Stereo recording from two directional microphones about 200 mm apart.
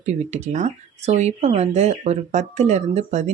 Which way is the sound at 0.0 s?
35° right (ahead or behind).